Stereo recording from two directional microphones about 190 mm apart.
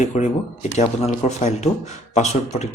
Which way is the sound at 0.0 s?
40° left (ahead or behind).